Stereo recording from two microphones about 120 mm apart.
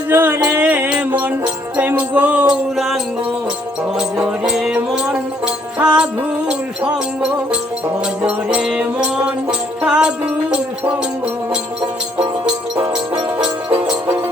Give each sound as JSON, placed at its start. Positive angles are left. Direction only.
{"t": 0.1, "sound": "music", "side_deg": -15}
{"t": 8.2, "sound": "music", "side_deg": -5}
{"t": 13.1, "sound": "music", "side_deg": -45}